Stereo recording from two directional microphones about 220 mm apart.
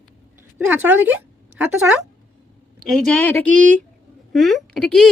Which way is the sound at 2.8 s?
Centre (ahead or behind).